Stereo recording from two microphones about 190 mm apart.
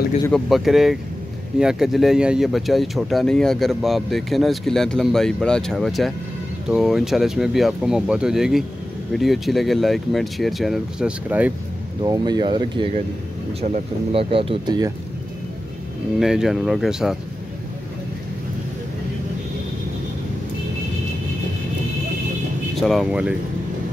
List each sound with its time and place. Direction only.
0.3 s speech: centre (ahead or behind)
12.0 s speech: 20° right (ahead or behind)
16.2 s speech: centre (ahead or behind)
22.8 s speech: centre (ahead or behind)